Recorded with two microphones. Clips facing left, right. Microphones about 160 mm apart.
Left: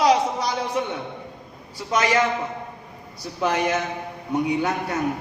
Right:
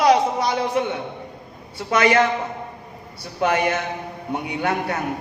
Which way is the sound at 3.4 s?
65° right (ahead or behind).